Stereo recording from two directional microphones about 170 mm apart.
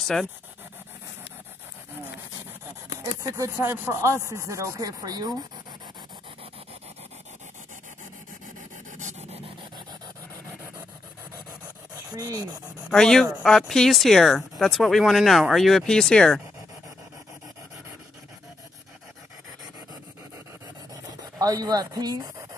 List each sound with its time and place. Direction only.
0.0 s speech: centre (ahead or behind)
3.0 s speech: 20° right (ahead or behind)
8.9 s rub: 45° right (ahead or behind)
12.1 s speech: 20° right (ahead or behind)
12.9 s speech: 5° left (ahead or behind)
20.9 s pant: 20° right (ahead or behind)